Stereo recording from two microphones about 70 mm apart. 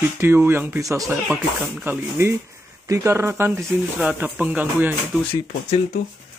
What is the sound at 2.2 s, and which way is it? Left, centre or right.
Speech, right.